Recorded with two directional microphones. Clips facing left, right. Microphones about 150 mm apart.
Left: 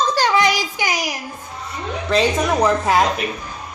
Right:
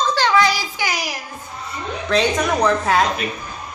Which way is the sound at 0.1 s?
10° left (ahead or behind).